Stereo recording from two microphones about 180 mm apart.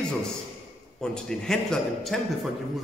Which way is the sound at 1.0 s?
5° left (ahead or behind).